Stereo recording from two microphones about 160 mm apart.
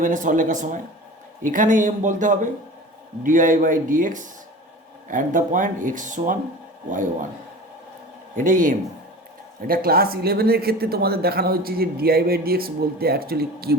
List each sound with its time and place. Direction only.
0.0 s a man's voice: 55° right (ahead or behind)
8.4 s speech: 55° right (ahead or behind)
9.6 s speech: 70° right (ahead or behind)